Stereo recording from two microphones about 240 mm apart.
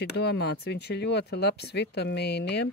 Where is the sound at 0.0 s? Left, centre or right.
Left.